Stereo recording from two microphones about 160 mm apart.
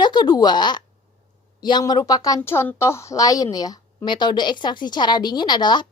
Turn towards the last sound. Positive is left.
turn(degrees=25)  # may be behind; listen again after turning